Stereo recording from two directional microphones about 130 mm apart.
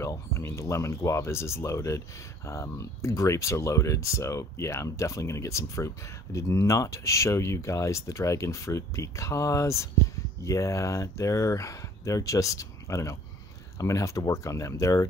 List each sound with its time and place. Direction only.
0.0 s speech: 20° left (ahead or behind)